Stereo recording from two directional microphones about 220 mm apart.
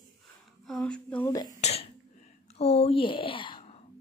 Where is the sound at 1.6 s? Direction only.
30° left (ahead or behind).